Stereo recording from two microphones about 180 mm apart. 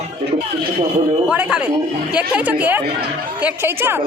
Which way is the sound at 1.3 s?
5° right (ahead or behind).